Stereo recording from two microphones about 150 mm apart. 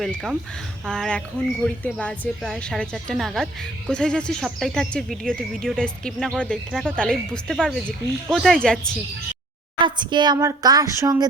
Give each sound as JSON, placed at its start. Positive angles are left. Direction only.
{"t": 0.0, "sound": "a woman's voice", "side_deg": 0}
{"t": 9.8, "sound": "a woman's voice", "side_deg": -30}